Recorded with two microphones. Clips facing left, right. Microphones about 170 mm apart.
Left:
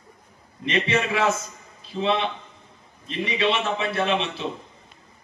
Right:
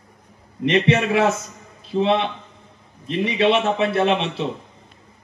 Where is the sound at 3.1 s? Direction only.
60° right (ahead or behind).